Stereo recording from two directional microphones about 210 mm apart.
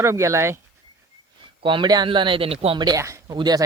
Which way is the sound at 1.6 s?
20° right (ahead or behind).